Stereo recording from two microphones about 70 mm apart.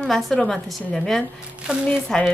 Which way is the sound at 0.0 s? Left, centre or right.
Centre.